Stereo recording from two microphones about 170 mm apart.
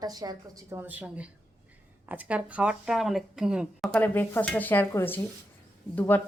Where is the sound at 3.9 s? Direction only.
10° left (ahead or behind).